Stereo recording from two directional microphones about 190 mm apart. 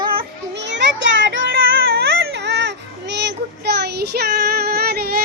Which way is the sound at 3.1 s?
65° right (ahead or behind).